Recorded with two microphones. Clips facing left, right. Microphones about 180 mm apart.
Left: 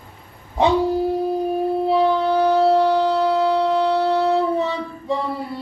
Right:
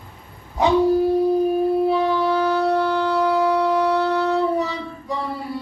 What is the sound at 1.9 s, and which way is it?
Music, 30° left (ahead or behind).